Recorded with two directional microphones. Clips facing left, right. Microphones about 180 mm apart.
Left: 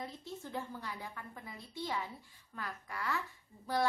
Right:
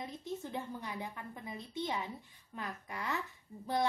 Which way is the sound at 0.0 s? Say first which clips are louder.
Right 3 dB; 20° right (ahead or behind).